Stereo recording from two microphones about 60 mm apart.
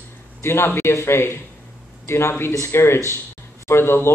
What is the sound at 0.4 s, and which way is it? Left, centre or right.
A man's voice, left.